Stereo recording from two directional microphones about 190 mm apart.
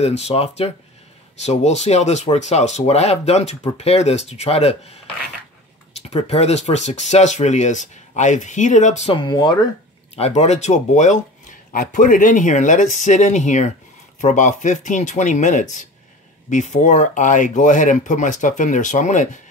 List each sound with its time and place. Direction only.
0.0 s speech: 35° left (ahead or behind)
6.0 s speech: 35° left (ahead or behind)
10.1 s speech: 35° left (ahead or behind)